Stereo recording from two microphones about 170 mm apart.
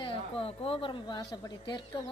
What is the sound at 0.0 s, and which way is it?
A woman's voice, 30° left (ahead or behind).